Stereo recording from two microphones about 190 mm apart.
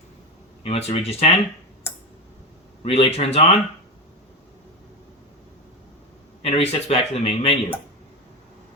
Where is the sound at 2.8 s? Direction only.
30° left (ahead or behind).